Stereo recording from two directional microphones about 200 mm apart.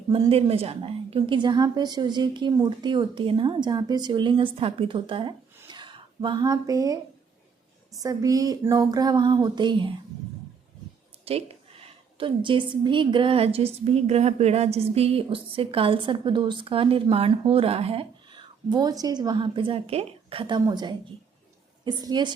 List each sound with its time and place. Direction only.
0.1 s a woman's voice: 25° right (ahead or behind)
5.6 s a sound: 25° right (ahead or behind)
7.9 s a woman's voice: 20° right (ahead or behind)
11.3 s a woman's voice: 30° right (ahead or behind)